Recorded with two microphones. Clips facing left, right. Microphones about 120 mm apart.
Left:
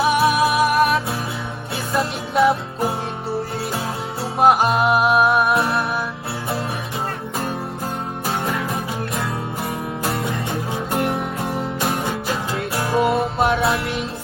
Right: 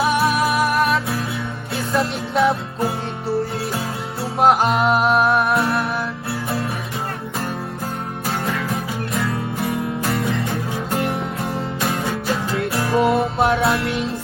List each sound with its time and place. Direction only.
0.0 s music: centre (ahead or behind)
4.4 s music: centre (ahead or behind)
10.0 s music: 25° left (ahead or behind)
12.3 s music: 5° left (ahead or behind)